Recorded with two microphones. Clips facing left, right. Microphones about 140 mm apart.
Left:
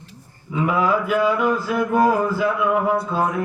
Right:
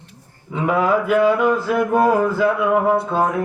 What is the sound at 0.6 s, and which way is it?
Speech, 50° right (ahead or behind).